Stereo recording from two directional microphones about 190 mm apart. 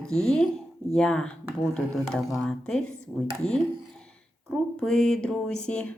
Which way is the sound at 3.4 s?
35° left (ahead or behind).